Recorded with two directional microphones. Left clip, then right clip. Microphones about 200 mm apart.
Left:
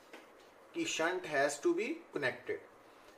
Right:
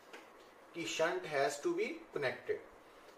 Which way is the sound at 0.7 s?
35° left (ahead or behind).